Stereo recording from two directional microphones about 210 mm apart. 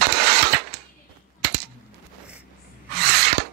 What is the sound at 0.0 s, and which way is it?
Mechanisms, 50° right (ahead or behind).